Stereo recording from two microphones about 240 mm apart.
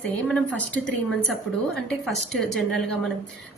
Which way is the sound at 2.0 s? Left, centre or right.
Centre.